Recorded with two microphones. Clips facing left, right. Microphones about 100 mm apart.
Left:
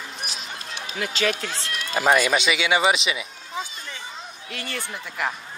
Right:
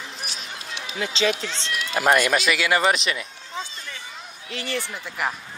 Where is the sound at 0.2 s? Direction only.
Centre (ahead or behind).